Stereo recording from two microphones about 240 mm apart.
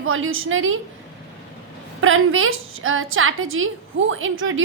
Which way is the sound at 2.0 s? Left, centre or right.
Right.